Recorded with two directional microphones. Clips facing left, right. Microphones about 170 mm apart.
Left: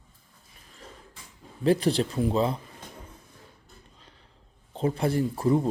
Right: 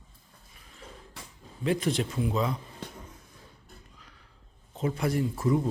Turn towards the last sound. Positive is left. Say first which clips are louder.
# left 3 dB
turn(degrees=30)  # may be behind; listen again after turning